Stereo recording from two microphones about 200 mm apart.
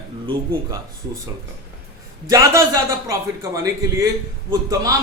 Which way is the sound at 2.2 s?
15° right (ahead or behind).